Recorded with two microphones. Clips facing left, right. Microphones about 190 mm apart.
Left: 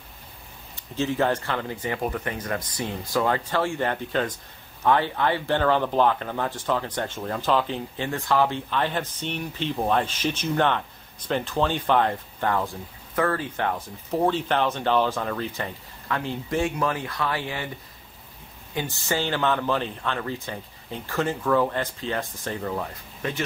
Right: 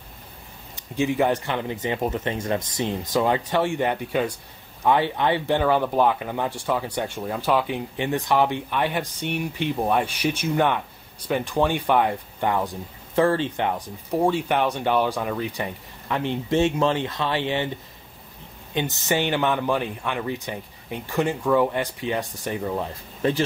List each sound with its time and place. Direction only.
0.7 s speech: 15° right (ahead or behind)
13.1 s speech: 25° right (ahead or behind)
18.7 s speech: 20° right (ahead or behind)
23.2 s speech: 30° right (ahead or behind)